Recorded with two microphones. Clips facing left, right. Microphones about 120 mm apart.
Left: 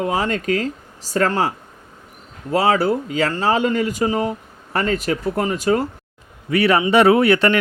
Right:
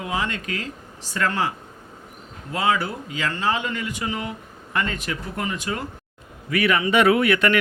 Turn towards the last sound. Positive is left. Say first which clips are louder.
# left 4 dB
turn(degrees=30)  # may be behind; listen again after turning